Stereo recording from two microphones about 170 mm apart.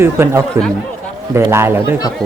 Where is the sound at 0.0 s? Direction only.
15° right (ahead or behind).